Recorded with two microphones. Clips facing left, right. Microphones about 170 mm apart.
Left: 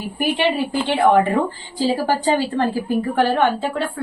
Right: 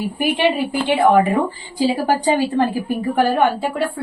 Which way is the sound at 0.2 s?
15° right (ahead or behind).